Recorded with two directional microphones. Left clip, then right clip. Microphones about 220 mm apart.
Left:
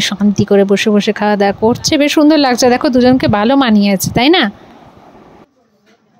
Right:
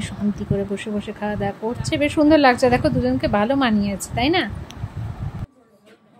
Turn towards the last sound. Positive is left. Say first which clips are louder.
# left 10 dB
turn(degrees=40)  # may be behind; listen again after turning